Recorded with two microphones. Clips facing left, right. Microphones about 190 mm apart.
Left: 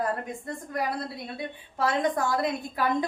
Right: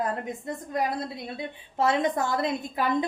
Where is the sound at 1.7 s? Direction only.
25° right (ahead or behind).